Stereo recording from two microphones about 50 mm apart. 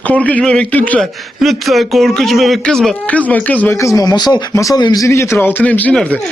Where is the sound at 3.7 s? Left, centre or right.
Left.